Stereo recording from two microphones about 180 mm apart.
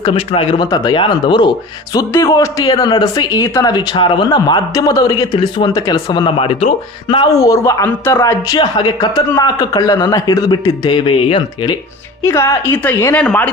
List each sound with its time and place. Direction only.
0.0 s speech: 30° left (ahead or behind)
12.2 s a woman's voice: 15° left (ahead or behind)